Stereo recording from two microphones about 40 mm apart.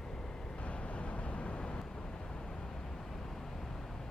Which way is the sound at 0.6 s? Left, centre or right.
Left.